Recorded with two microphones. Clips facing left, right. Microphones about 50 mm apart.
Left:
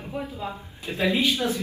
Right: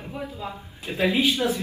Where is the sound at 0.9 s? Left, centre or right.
Right.